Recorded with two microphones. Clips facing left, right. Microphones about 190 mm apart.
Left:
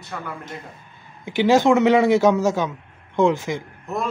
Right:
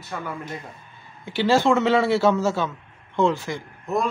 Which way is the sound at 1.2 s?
15° left (ahead or behind).